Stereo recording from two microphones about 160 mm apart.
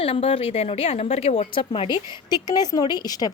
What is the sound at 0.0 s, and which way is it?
A woman's voice, 35° left (ahead or behind).